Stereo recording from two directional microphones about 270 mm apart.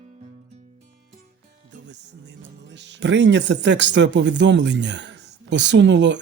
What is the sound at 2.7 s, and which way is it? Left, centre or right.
Speech, right.